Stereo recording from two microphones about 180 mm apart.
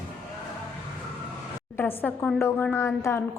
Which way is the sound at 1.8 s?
10° left (ahead or behind).